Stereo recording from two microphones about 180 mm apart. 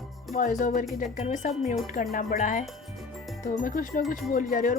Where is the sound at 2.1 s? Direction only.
45° left (ahead or behind).